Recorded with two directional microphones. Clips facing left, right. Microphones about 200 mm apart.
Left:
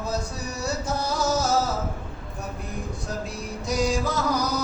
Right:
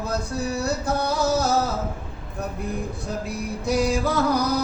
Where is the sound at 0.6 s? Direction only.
60° right (ahead or behind).